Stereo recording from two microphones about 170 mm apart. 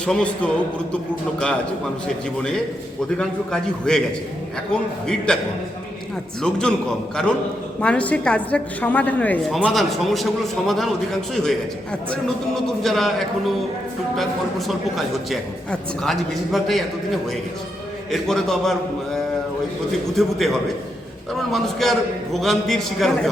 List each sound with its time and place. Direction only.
0.0 s a man's voice: 5° left (ahead or behind)
3.2 s a man's voice: 5° left (ahead or behind)
6.4 s a man's voice: 5° left (ahead or behind)
14.7 s a man's voice: centre (ahead or behind)